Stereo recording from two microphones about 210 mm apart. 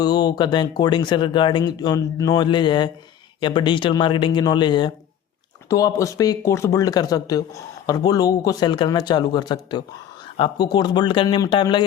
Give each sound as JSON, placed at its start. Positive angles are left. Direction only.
{"t": 0.0, "sound": "speech", "side_deg": 20}